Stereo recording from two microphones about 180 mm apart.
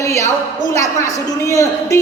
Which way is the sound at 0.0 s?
15° left (ahead or behind).